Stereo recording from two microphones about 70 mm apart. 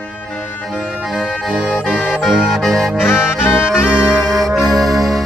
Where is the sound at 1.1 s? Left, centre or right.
Centre.